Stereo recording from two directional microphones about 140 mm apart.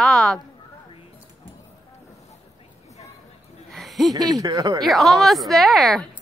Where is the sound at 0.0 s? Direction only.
5° left (ahead or behind).